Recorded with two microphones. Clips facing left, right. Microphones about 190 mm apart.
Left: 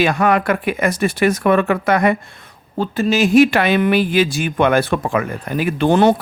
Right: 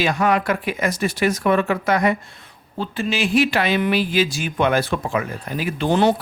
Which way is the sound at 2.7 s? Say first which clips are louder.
Left 7 dB; 45° left (ahead or behind).